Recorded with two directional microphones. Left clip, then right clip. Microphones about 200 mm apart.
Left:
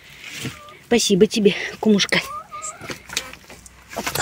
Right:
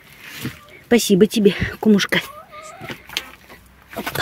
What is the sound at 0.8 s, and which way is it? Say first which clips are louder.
Speech: right 1 dB; 35° right (ahead or behind).